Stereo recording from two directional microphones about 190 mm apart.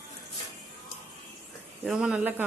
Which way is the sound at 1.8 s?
5° right (ahead or behind).